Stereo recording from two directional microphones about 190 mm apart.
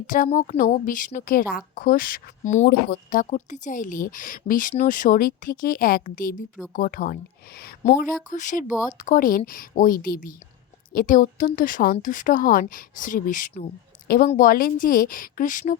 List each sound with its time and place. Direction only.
0.3 s a woman's voice: 45° left (ahead or behind)
2.6 s a woman's voice: 50° left (ahead or behind)
7.9 s a woman's voice: 40° left (ahead or behind)